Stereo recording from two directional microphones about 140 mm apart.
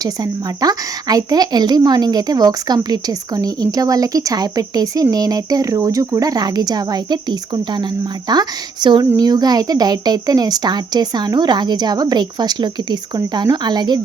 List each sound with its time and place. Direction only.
0.0 s speech: 25° right (ahead or behind)